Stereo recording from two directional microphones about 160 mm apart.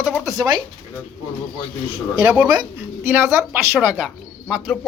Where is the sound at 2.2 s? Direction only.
10° right (ahead or behind).